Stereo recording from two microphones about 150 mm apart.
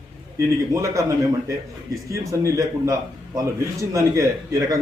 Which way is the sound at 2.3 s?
20° right (ahead or behind).